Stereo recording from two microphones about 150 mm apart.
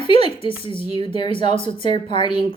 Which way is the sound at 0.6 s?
35° left (ahead or behind).